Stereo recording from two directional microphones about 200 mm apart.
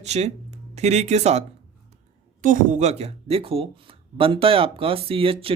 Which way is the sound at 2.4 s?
40° right (ahead or behind).